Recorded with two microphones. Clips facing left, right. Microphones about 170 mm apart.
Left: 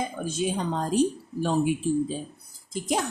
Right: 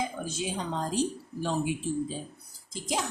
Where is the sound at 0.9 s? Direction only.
55° left (ahead or behind).